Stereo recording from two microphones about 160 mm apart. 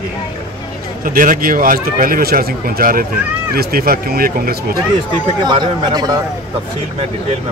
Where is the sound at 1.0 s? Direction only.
60° right (ahead or behind).